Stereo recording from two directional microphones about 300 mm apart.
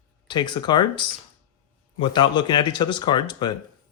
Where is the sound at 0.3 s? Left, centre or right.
Centre.